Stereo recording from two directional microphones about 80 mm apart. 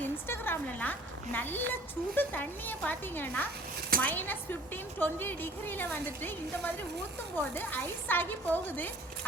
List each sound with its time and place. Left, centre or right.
0.3 s speech: left